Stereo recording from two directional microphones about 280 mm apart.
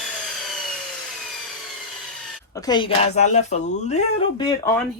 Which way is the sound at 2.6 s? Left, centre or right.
Centre.